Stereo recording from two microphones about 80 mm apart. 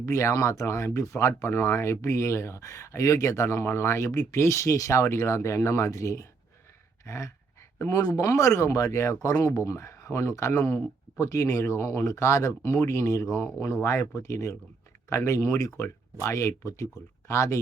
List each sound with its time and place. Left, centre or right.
0.0 s speech: left
7.0 s dog: left
7.9 s speech: left